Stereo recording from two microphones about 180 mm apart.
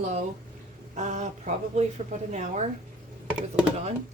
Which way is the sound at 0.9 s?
40° right (ahead or behind).